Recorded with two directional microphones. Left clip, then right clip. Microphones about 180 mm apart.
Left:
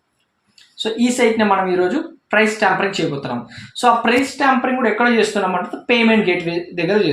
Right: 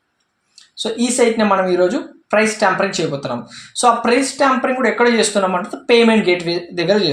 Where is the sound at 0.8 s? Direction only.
35° right (ahead or behind).